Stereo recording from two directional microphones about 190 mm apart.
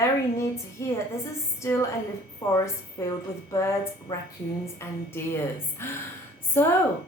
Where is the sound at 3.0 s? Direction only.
15° left (ahead or behind).